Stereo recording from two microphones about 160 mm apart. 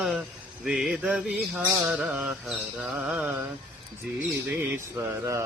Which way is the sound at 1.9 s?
10° right (ahead or behind).